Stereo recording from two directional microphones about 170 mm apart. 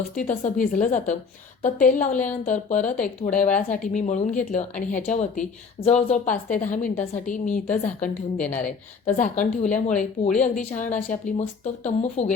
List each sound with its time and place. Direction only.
0.2 s speech: 50° left (ahead or behind)